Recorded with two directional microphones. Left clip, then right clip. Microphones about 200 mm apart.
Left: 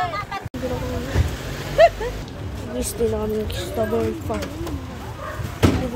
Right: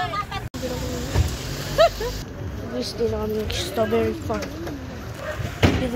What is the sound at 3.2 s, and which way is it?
Speech, 15° left (ahead or behind).